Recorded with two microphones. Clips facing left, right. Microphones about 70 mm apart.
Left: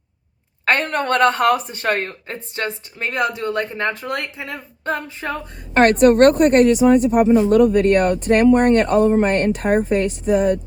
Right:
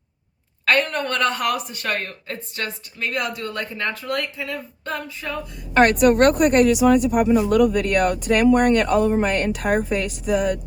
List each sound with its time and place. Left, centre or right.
0.6 s speech: left